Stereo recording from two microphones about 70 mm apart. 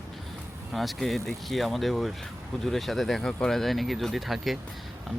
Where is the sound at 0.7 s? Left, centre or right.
Centre.